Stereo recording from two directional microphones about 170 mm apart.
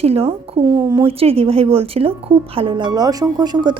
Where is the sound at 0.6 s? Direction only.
20° right (ahead or behind).